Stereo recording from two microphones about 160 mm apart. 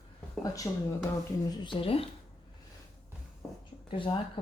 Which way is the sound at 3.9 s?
30° left (ahead or behind).